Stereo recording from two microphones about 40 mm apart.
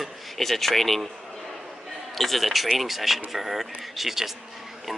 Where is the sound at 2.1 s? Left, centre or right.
Centre.